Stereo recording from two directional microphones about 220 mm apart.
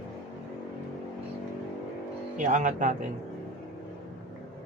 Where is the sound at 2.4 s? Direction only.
35° right (ahead or behind).